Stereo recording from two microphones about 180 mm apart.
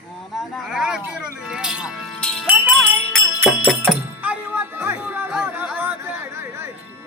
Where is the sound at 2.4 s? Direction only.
10° right (ahead or behind).